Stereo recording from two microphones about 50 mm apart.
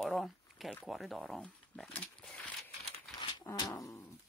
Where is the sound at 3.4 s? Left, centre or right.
Left.